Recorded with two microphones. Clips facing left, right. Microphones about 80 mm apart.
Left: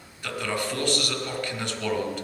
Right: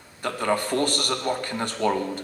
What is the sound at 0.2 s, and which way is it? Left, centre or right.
A man's voice, right.